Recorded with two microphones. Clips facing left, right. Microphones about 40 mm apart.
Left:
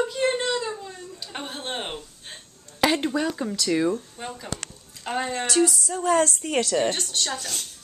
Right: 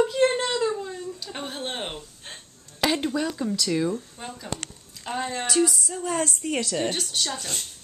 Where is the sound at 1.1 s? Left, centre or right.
Centre.